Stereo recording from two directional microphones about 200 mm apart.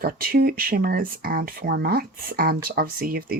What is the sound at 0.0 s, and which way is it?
Speech, 50° right (ahead or behind).